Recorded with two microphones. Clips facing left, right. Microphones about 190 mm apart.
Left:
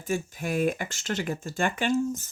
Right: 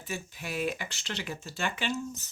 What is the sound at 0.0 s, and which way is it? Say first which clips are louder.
Speech: left 9 dB; 45° left (ahead or behind).